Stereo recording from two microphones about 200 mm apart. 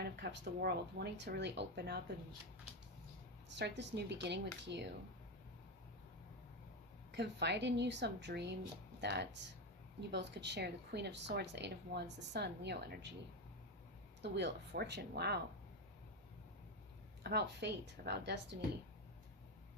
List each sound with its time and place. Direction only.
0.0 s speech: 55° right (ahead or behind)
3.6 s speech: 60° right (ahead or behind)
7.1 s speech: 60° right (ahead or behind)
14.2 s speech: 60° right (ahead or behind)
17.2 s speech: 55° right (ahead or behind)